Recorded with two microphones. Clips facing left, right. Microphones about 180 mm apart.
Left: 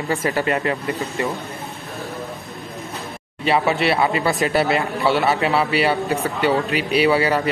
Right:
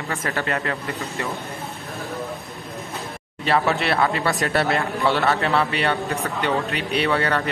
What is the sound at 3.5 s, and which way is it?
A man's voice, 5° left (ahead or behind).